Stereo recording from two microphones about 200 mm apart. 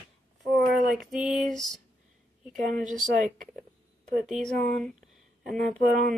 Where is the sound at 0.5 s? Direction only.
Centre (ahead or behind).